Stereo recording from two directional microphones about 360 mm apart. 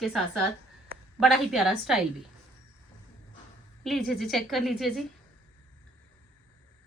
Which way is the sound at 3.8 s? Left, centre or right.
Centre.